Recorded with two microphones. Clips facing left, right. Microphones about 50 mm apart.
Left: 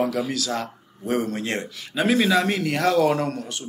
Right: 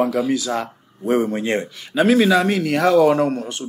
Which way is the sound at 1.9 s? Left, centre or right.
Centre.